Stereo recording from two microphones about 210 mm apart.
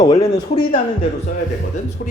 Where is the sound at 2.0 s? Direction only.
40° left (ahead or behind).